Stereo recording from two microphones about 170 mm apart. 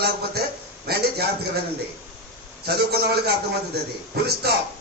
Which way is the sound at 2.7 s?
70° right (ahead or behind).